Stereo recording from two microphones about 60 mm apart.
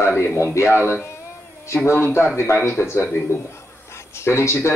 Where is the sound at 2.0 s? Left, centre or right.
Left.